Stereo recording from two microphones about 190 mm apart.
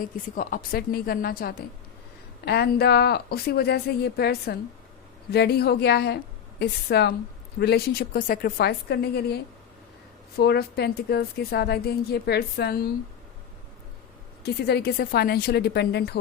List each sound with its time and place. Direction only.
0.0 s a woman's voice: 45° left (ahead or behind)
14.4 s a woman's voice: 60° left (ahead or behind)